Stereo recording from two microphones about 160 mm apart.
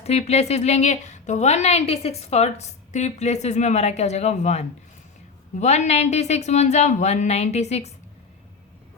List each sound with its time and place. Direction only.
0.0 s a woman's voice: 40° left (ahead or behind)